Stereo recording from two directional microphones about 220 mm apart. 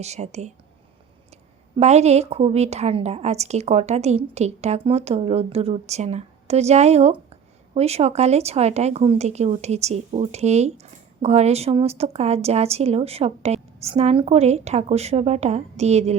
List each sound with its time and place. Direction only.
0.0 s speech: 30° right (ahead or behind)
1.7 s a woman's voice: 30° right (ahead or behind)